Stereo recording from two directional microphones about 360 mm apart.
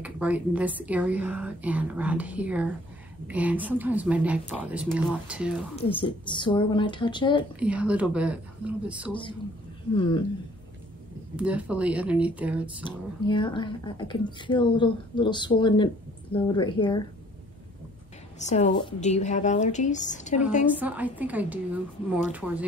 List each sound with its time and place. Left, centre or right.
0.0 s a woman's voice: centre
5.9 s speech: centre
7.5 s a woman's voice: centre
9.9 s speech: centre
11.3 s a woman's voice: centre
12.8 s speech: centre
18.5 s a woman's voice: centre
20.8 s a woman's voice: centre